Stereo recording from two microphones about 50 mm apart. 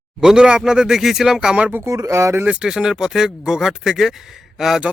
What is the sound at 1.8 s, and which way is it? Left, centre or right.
Speech, right.